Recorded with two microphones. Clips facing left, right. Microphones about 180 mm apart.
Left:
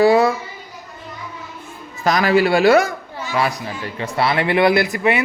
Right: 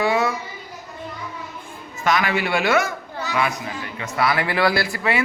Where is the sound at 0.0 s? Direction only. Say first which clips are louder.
Left 7 dB; 35° left (ahead or behind).